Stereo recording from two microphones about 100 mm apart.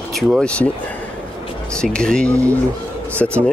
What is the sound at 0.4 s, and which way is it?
Speech, 10° left (ahead or behind).